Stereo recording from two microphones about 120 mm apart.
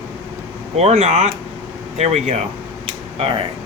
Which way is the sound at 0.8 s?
70° right (ahead or behind).